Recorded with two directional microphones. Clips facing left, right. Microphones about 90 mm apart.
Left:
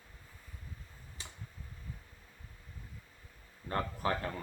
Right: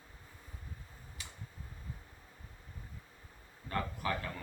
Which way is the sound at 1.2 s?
30° left (ahead or behind).